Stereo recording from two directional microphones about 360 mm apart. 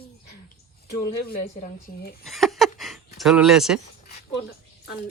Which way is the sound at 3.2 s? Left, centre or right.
Centre.